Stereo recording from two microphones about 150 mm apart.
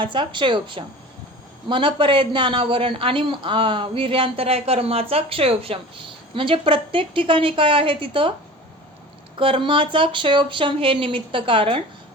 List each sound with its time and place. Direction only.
0.0 s a man's voice: 35° right (ahead or behind)
9.4 s a man's voice: 35° right (ahead or behind)